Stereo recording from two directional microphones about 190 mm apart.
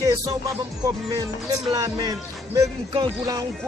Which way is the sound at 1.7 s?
20° right (ahead or behind).